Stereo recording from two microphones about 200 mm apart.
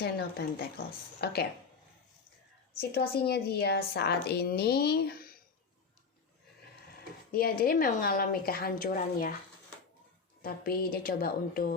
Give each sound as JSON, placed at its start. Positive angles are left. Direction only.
{"t": 0.0, "sound": "a woman's voice", "side_deg": 50}
{"t": 2.7, "sound": "a woman's voice", "side_deg": 50}
{"t": 7.3, "sound": "a woman's voice", "side_deg": 50}
{"t": 10.4, "sound": "a woman's voice", "side_deg": 45}